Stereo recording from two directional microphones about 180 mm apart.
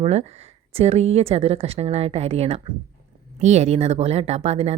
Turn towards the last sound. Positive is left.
turn(degrees=-35)  # may be behind; listen again after turning